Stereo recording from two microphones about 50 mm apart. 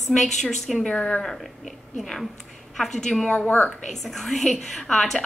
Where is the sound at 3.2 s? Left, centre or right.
Left.